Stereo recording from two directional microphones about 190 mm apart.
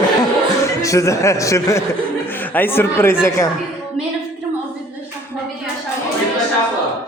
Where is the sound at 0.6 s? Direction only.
15° left (ahead or behind).